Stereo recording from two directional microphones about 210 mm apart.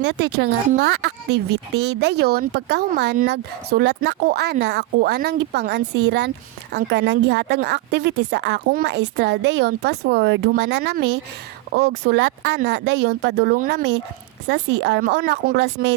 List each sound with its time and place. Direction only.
0.0 s a woman's voice: 55° right (ahead or behind)